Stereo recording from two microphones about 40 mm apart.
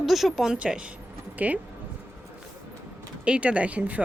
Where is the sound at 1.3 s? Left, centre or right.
Right.